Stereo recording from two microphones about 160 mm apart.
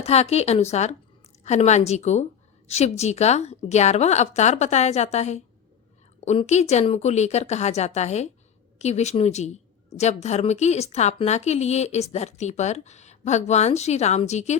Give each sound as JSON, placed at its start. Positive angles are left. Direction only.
{"t": 0.0, "sound": "a woman's voice", "side_deg": 40}